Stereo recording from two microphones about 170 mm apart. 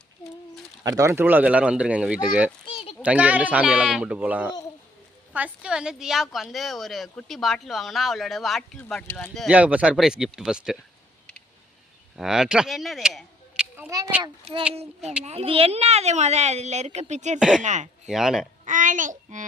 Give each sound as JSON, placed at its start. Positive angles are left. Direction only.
{"t": 0.9, "sound": "speech", "side_deg": -20}
{"t": 2.6, "sound": "a sound", "side_deg": 35}
{"t": 3.0, "sound": "a woman's voice", "side_deg": -10}
{"t": 12.1, "sound": "speech", "side_deg": 0}
{"t": 14.2, "sound": "speech", "side_deg": -30}
{"t": 18.1, "sound": "a woman's voice", "side_deg": 0}
{"t": 18.6, "sound": "child singing", "side_deg": -50}